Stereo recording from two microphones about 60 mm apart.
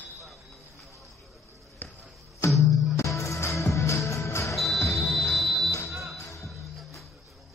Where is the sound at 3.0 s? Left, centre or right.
Left.